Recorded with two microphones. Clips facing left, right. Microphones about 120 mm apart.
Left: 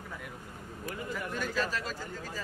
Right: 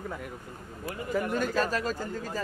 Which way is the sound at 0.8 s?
45° right (ahead or behind).